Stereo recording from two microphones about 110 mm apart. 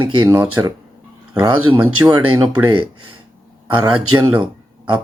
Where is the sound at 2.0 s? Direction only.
35° right (ahead or behind).